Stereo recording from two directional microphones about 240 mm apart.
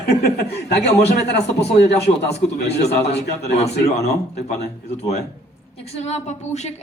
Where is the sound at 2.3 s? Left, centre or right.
Left.